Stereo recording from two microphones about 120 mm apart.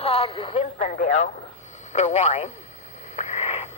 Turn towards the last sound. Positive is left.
turn(degrees=55)  # may be behind; listen again after turning